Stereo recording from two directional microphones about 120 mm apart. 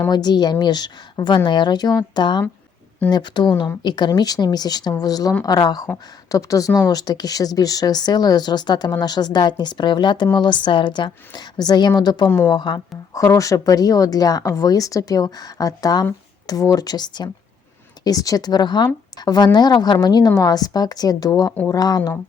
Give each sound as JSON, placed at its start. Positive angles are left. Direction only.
{"t": 0.1, "sound": "speech", "side_deg": 35}